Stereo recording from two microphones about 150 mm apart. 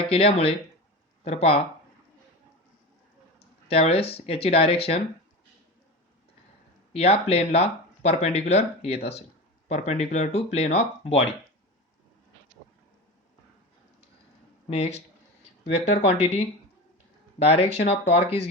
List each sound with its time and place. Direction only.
0.1 s speech: 40° left (ahead or behind)
3.7 s speech: 40° left (ahead or behind)
6.9 s speech: 45° left (ahead or behind)
14.7 s speech: 45° left (ahead or behind)
16.1 s speech: 50° left (ahead or behind)